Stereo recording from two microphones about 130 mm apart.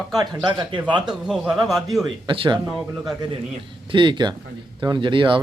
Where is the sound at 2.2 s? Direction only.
40° right (ahead or behind).